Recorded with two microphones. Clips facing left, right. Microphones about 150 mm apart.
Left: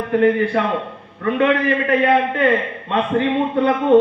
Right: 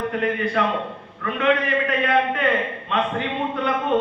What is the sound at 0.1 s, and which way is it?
A man's voice, 30° left (ahead or behind).